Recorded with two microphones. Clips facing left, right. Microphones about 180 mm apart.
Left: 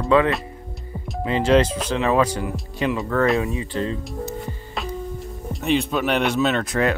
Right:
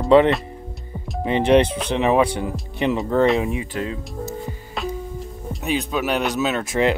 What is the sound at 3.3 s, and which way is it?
Speech, 20° right (ahead or behind).